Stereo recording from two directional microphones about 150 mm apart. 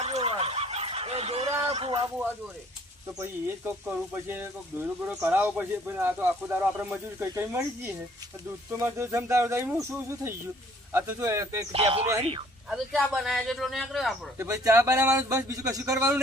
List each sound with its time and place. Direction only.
0.0 s a sound: 45° right (ahead or behind)
3.2 s speech: 10° right (ahead or behind)
11.7 s speech: 40° right (ahead or behind)
12.7 s a man's voice: centre (ahead or behind)
14.3 s speech: 20° right (ahead or behind)